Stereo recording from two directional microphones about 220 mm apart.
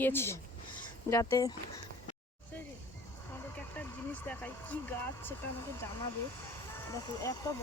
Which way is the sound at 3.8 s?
5° left (ahead or behind).